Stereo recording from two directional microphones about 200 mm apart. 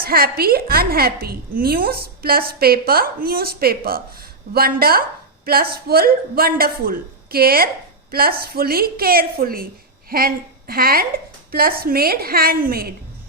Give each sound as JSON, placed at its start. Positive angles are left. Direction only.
{"t": 0.0, "sound": "a woman's voice", "side_deg": -50}